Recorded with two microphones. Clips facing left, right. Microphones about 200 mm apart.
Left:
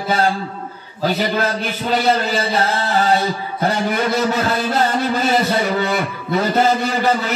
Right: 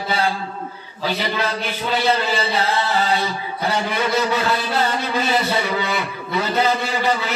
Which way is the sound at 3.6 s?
45° left (ahead or behind).